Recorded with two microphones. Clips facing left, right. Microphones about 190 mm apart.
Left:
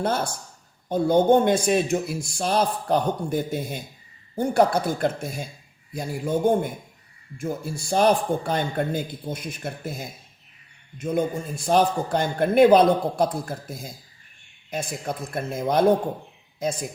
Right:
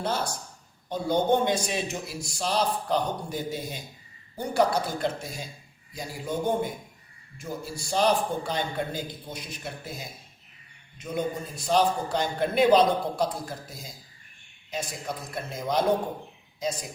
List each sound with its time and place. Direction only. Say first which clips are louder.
0.0 s a man's voice: left 4 dB; 55° left (ahead or behind)